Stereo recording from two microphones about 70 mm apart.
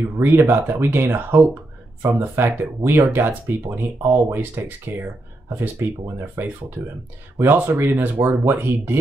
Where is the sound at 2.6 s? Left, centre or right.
Right.